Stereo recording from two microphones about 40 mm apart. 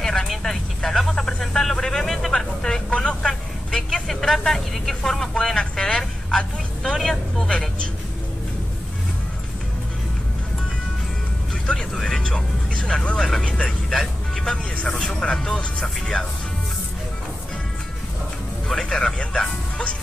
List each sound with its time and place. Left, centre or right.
0.0 s vehicle: centre
1.4 s music: centre
2.9 s vehicle: left
3.3 s vehicle: centre
11.7 s music: centre
13.7 s vehicle: centre
15.5 s music: centre
18.8 s music: left